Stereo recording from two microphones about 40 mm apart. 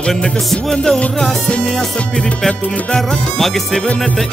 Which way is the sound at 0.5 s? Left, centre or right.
Centre.